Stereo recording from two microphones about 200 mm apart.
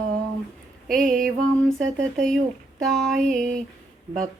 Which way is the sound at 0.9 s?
Centre (ahead or behind).